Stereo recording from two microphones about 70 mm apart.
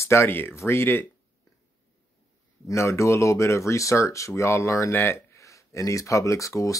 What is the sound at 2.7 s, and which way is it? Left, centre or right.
Speech, left.